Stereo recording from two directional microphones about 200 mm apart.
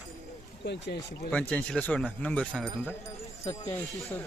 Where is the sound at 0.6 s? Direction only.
60° left (ahead or behind).